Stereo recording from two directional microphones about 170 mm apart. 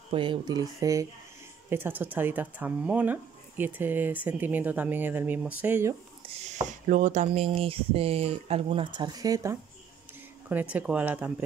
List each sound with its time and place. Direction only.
0.1 s speech: 30° right (ahead or behind); by 5.9 s 15° right (ahead or behind)
6.3 s a sound: 40° right (ahead or behind)
6.9 s speech: 45° right (ahead or behind); by 11.3 s 10° right (ahead or behind)